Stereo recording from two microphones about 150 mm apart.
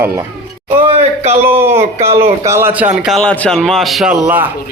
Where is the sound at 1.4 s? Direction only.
15° right (ahead or behind).